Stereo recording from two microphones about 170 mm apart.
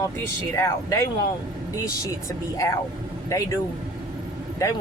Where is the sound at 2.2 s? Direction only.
20° left (ahead or behind).